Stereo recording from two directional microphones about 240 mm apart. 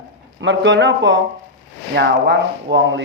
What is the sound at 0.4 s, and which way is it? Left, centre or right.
Speech, right.